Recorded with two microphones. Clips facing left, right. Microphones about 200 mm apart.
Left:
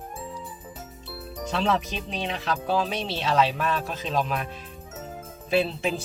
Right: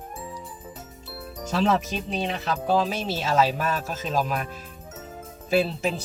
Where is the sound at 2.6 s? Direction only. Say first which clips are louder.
Right 3 dB; 45° right (ahead or behind).